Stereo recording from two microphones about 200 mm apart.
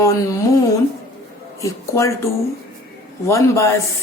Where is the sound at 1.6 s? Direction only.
15° left (ahead or behind).